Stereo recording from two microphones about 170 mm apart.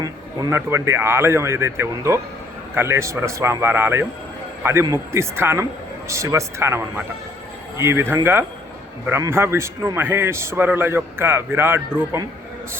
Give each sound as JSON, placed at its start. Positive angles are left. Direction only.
{"t": 0.0, "sound": "a man's voice", "side_deg": -20}